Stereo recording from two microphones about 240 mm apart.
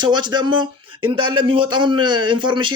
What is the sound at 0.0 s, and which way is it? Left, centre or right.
Speech, centre.